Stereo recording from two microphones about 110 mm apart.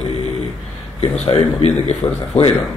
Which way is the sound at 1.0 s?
65° left (ahead or behind).